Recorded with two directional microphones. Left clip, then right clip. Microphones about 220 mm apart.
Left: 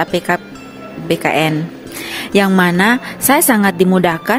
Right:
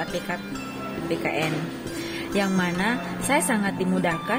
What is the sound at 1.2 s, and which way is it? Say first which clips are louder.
Speech: left 13 dB; 50° left (ahead or behind).